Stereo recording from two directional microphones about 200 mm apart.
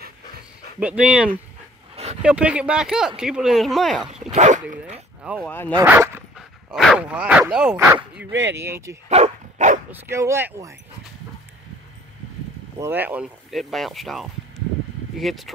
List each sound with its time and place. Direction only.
0.7 s speech: 5° right (ahead or behind)
4.1 s speech: 35° right (ahead or behind)
5.4 s speech: 10° left (ahead or behind)
5.8 s speech: 10° right (ahead or behind)
8.3 s speech: 65° right (ahead or behind)
8.5 s speech: 10° right (ahead or behind)
9.1 s dog: 35° right (ahead or behind)
9.8 s speech: 10° right (ahead or behind)
12.7 s speech: 10° right (ahead or behind)